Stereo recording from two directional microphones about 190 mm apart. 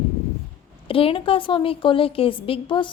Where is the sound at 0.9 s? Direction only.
30° left (ahead or behind).